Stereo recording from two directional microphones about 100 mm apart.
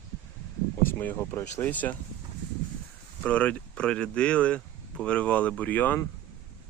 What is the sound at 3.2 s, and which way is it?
Speech, 15° left (ahead or behind).